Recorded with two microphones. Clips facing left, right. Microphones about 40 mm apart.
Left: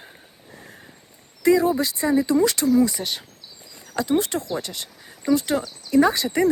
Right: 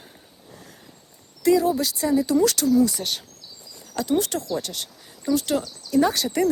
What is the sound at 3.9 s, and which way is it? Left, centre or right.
Speech, left.